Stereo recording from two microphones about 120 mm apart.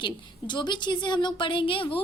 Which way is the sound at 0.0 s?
40° left (ahead or behind).